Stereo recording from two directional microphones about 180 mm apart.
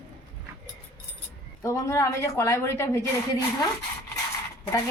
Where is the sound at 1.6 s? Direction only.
15° left (ahead or behind).